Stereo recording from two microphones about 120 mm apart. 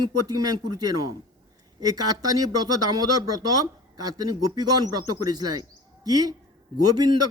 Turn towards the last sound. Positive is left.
turn(degrees=-35)  # may be behind; listen again after turning